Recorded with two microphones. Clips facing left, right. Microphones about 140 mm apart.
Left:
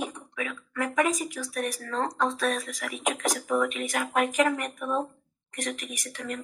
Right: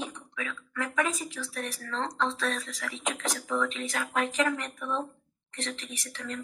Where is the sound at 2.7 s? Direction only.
20° left (ahead or behind).